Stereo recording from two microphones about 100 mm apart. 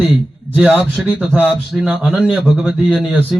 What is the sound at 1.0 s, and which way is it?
Speech, 15° right (ahead or behind).